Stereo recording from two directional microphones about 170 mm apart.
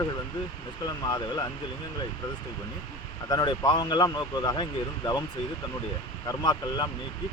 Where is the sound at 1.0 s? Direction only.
25° left (ahead or behind).